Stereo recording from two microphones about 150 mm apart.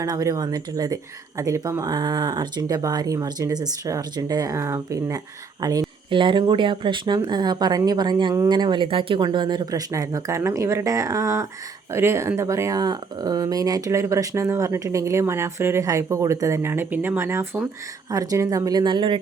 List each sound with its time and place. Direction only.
0.0 s speech: 20° right (ahead or behind)